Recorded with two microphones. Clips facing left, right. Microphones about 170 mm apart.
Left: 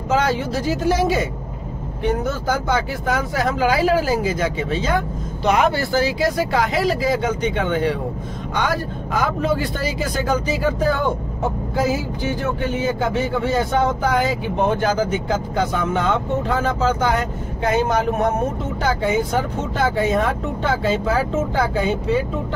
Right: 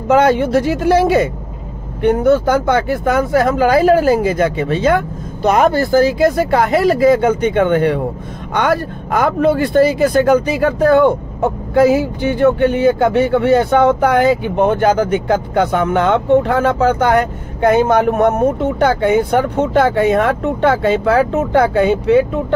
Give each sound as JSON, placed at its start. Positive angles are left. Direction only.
{"t": 0.1, "sound": "speech", "side_deg": -60}